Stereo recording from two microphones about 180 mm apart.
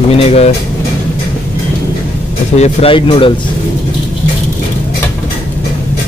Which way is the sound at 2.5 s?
35° left (ahead or behind).